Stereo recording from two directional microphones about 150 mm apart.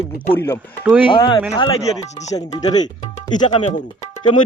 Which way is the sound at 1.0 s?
35° left (ahead or behind).